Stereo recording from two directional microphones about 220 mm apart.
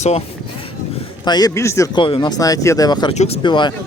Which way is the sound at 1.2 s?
20° left (ahead or behind).